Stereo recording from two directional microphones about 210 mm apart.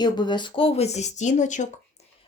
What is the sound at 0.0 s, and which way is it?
Speech, 20° left (ahead or behind).